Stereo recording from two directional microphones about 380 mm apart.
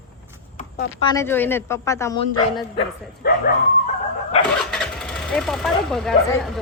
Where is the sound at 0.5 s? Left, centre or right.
Left.